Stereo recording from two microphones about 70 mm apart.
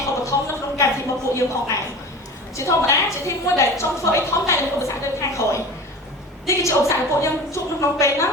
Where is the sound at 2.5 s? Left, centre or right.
Left.